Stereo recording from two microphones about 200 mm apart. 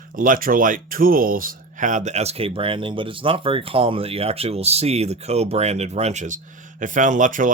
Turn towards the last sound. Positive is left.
turn(degrees=-40)  # may be behind; listen again after turning